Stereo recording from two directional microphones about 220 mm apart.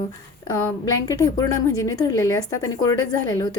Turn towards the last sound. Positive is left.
turn(degrees=20)  # may be behind; listen again after turning